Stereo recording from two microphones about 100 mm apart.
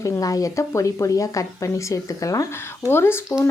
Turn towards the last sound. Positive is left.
turn(degrees=25)  # may be behind; listen again after turning